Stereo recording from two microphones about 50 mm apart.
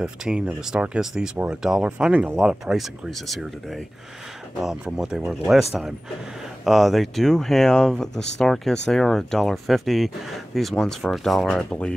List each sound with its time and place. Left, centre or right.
0.0 s speech: centre
2.1 s speech: right
2.4 s speech: centre
3.1 s speech: centre
4.6 s speech: centre